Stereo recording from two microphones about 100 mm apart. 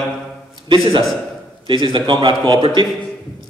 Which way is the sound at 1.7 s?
55° right (ahead or behind).